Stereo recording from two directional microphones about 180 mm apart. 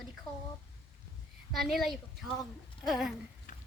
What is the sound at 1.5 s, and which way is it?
A woman's voice, centre (ahead or behind).